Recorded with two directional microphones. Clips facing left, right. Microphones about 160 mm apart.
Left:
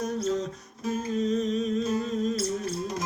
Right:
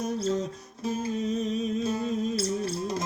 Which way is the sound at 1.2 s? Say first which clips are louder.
Left 5 dB; 5° right (ahead or behind).